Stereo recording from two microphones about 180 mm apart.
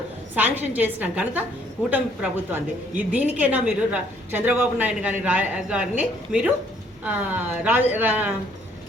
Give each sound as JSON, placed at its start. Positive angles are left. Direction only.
{"t": 0.3, "sound": "a woman's voice", "side_deg": -10}